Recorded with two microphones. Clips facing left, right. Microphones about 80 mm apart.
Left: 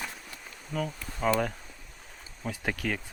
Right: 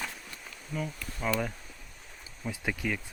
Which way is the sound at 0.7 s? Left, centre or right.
Left.